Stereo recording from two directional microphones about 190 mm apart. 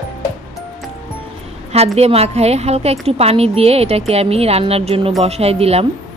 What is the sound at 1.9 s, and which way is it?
A woman's voice, 35° right (ahead or behind).